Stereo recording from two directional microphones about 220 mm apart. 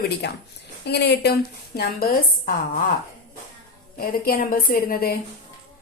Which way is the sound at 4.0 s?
40° left (ahead or behind).